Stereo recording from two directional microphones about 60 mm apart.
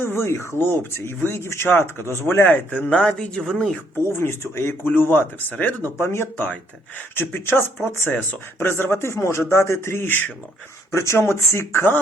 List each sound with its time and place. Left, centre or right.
0.0 s speech: left
2.5 s speech: left
2.9 s speech: centre
4.0 s speech: left
6.0 s speech: left
10.9 s speech: left